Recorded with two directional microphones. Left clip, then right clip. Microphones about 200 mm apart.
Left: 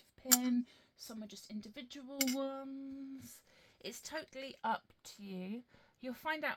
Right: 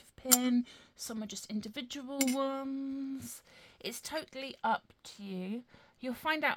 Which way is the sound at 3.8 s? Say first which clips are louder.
Right 5 dB; 30° right (ahead or behind).